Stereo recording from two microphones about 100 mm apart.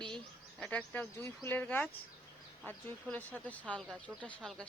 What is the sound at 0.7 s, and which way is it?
Speech, 15° left (ahead or behind).